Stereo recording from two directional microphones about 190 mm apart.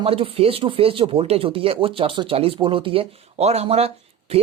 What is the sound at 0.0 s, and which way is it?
Speech, 30° right (ahead or behind).